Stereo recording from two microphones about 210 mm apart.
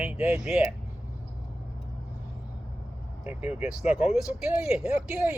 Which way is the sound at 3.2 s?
5° right (ahead or behind).